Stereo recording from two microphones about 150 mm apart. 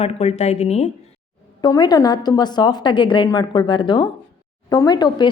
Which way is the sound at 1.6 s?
25° left (ahead or behind).